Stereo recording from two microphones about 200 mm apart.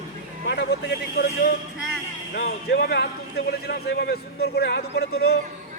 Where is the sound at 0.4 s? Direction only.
60° left (ahead or behind).